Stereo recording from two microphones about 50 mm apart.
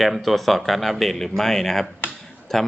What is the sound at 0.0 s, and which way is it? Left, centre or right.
Speech, centre.